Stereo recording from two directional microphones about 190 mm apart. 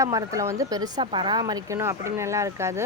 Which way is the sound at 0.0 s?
20° right (ahead or behind).